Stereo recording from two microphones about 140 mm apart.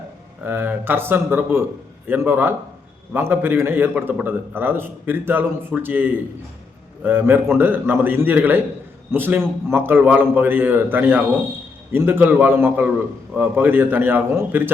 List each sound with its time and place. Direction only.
0.4 s a man's voice: 15° right (ahead or behind)